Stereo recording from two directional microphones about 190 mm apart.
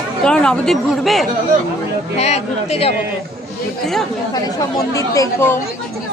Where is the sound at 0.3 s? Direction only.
5° left (ahead or behind).